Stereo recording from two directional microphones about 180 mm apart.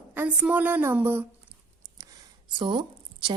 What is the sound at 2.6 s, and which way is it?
Speech, 25° right (ahead or behind).